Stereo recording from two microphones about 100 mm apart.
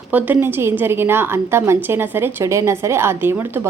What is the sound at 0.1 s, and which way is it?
A woman's voice, 15° right (ahead or behind).